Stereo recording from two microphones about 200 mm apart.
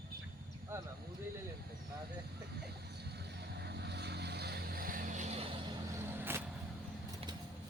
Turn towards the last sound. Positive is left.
turn(degrees=-10)  # may be behind; listen again after turning